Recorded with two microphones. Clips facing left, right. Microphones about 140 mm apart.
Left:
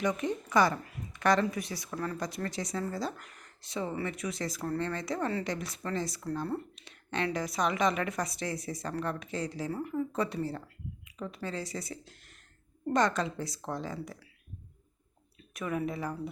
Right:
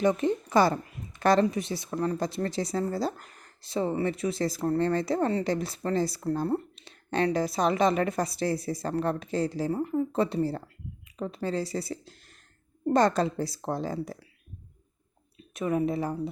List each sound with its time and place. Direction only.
0.0 s speech: 30° right (ahead or behind)
15.5 s a woman's voice: 30° right (ahead or behind)